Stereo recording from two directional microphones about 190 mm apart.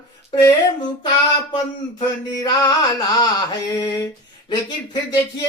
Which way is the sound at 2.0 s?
20° left (ahead or behind).